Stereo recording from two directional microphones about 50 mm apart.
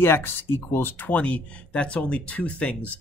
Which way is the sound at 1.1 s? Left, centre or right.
Left.